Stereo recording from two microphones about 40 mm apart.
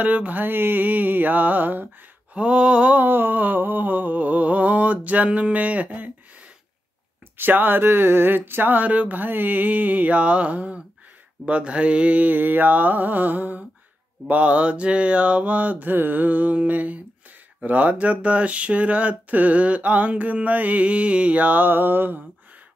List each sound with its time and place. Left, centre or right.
0.0 s mantra: right
2.3 s mantra: right
2.9 s speech: right
7.3 s speech: right
8.8 s speech: right
11.4 s mantra: right
14.2 s speech: right
21.6 s speech: right